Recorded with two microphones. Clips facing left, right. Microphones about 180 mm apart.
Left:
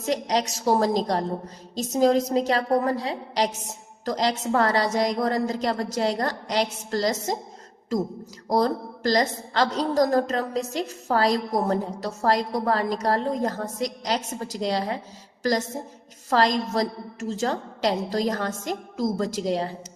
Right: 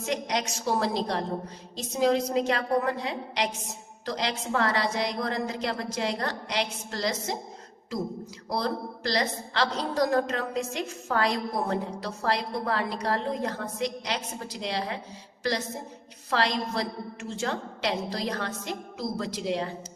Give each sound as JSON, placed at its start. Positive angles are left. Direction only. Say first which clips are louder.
{"t": 0.0, "sound": "a woman's voice", "louder": "left 5 dB", "side_deg": 35}
{"t": 8.4, "sound": "a woman's voice", "louder": "left 7 dB", "side_deg": 40}